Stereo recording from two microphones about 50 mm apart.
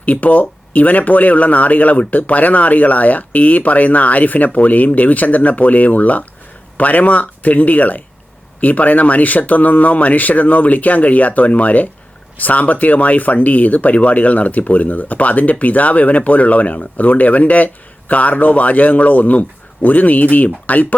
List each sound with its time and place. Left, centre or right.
0.0 s speech: left